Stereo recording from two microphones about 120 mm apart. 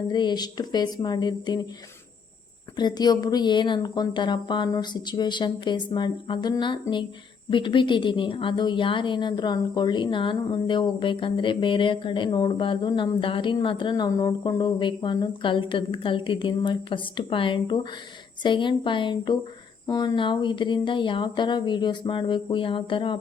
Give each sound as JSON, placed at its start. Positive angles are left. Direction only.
{"t": 0.1, "sound": "a woman's voice", "side_deg": 40}
{"t": 2.7, "sound": "a woman's voice", "side_deg": 35}